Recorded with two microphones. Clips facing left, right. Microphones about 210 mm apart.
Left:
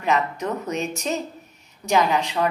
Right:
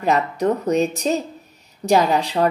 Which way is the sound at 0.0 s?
35° right (ahead or behind).